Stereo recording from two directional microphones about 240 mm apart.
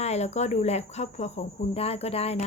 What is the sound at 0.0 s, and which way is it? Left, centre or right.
Speech, left.